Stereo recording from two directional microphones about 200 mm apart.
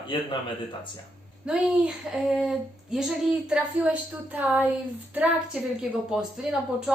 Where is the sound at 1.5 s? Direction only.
5° right (ahead or behind).